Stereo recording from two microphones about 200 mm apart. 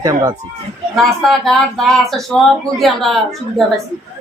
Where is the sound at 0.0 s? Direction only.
15° right (ahead or behind).